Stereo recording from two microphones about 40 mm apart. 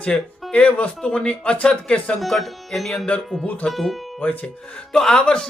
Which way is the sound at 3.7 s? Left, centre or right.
Centre.